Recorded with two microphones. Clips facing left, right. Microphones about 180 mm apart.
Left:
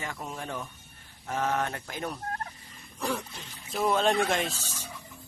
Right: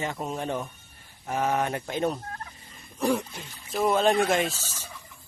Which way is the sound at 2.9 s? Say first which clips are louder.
Right 7 dB; 20° right (ahead or behind).